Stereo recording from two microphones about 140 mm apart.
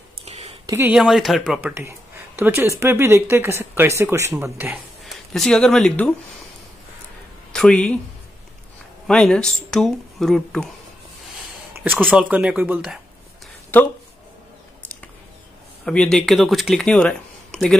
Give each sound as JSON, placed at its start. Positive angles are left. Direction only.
{"t": 0.2, "sound": "a sound", "side_deg": -50}
{"t": 0.7, "sound": "speech", "side_deg": -20}
{"t": 0.9, "sound": "speech", "side_deg": 0}
{"t": 1.7, "sound": "speech", "side_deg": -20}
{"t": 5.0, "sound": "speech", "side_deg": 0}
{"t": 7.5, "sound": "speech", "side_deg": 5}
{"t": 9.0, "sound": "speech", "side_deg": 5}
{"t": 12.1, "sound": "speech", "side_deg": -10}
{"t": 15.8, "sound": "speech", "side_deg": 5}